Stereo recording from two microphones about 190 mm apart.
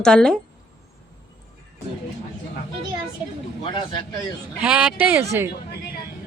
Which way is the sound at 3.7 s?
25° left (ahead or behind).